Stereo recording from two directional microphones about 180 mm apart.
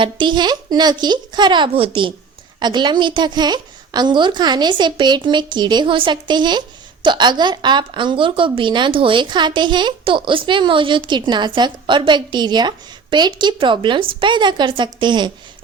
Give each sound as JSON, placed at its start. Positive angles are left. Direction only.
{"t": 0.0, "sound": "a woman's voice", "side_deg": -25}